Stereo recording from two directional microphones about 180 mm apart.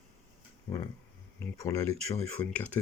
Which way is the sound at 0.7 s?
20° left (ahead or behind).